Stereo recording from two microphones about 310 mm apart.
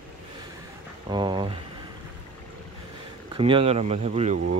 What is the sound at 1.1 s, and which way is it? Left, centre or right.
Speech, centre.